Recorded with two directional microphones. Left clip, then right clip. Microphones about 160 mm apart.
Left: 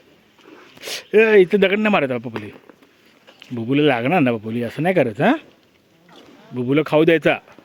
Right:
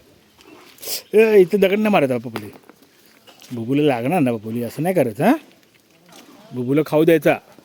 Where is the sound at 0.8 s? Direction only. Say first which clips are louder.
Even; 15° right (ahead or behind).